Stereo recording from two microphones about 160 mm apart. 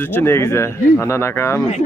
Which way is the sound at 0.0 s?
15° left (ahead or behind).